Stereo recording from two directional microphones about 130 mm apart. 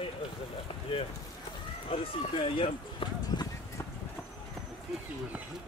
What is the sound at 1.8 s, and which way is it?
Speech, 50° left (ahead or behind).